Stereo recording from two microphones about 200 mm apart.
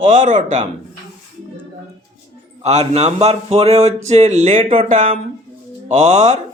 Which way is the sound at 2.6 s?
35° right (ahead or behind).